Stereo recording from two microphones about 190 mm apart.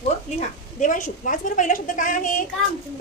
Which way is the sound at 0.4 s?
40° left (ahead or behind).